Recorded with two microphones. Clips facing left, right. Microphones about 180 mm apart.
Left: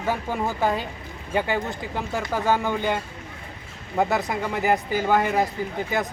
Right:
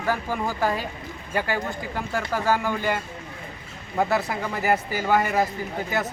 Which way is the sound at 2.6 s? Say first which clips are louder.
Left 1 dB; 20° left (ahead or behind).